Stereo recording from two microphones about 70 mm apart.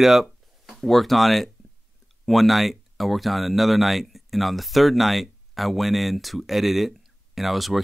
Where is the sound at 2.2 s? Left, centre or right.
Centre.